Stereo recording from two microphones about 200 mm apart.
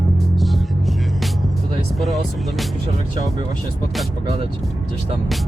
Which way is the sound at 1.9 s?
Centre (ahead or behind).